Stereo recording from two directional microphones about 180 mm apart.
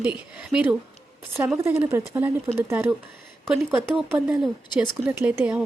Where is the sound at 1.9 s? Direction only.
10° right (ahead or behind).